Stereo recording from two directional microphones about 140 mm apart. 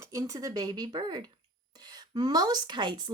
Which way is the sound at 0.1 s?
25° right (ahead or behind).